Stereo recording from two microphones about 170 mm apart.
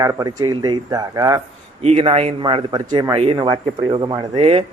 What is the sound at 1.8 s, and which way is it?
A man's voice, 35° right (ahead or behind).